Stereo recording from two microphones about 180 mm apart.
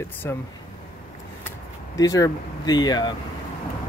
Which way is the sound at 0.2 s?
15° left (ahead or behind).